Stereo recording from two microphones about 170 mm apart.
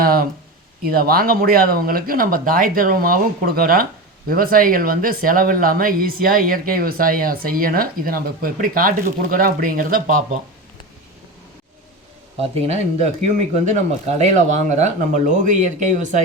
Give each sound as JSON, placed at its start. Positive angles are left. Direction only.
{"t": 0.0, "sound": "a sound", "side_deg": -60}
{"t": 0.8, "sound": "speech", "side_deg": -60}
{"t": 12.4, "sound": "speech", "side_deg": -40}